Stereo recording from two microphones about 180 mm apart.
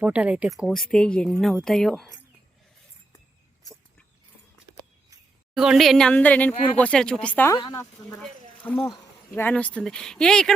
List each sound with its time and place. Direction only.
0.0 s speech: 5° right (ahead or behind)
5.5 s speech: centre (ahead or behind)
7.5 s speech: 20° left (ahead or behind); by 10.5 s 5° left (ahead or behind)